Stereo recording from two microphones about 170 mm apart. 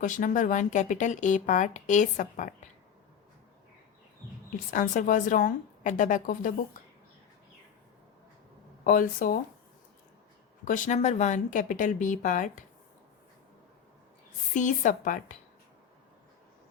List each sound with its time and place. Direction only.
0.0 s speech: 50° left (ahead or behind)
4.7 s speech: 50° left (ahead or behind)
8.8 s speech: 55° left (ahead or behind)
10.7 s speech: 45° left (ahead or behind)
14.5 s speech: 45° left (ahead or behind)